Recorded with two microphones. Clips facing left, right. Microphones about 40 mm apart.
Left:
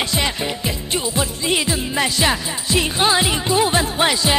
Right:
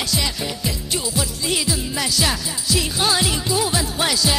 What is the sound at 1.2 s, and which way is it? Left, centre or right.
Jingle bell, left.